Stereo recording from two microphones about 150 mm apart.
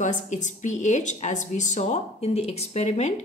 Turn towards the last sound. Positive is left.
turn(degrees=45)  # may be behind; listen again after turning